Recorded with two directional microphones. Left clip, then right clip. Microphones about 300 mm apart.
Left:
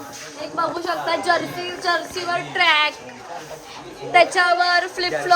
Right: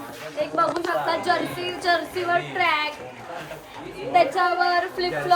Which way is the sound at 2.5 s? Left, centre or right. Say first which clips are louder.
Left 10 dB; left.